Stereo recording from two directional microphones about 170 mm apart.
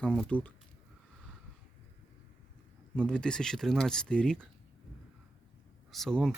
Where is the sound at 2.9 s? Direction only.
5° left (ahead or behind).